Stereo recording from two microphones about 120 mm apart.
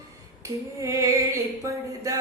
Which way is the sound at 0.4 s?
25° right (ahead or behind).